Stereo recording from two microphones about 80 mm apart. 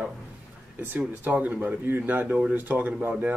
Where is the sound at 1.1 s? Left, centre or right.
Centre.